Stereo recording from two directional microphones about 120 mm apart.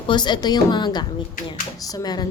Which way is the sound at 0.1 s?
40° left (ahead or behind).